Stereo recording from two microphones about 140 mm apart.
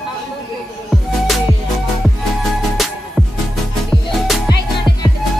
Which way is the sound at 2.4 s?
Centre (ahead or behind).